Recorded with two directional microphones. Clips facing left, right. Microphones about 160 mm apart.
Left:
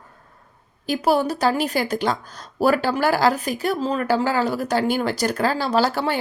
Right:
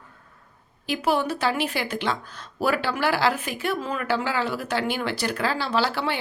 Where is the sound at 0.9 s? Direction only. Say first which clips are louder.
Left 4 dB; 40° left (ahead or behind).